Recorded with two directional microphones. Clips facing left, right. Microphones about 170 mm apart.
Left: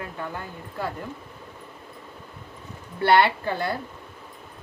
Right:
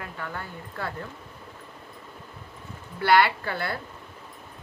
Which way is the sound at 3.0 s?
25° left (ahead or behind).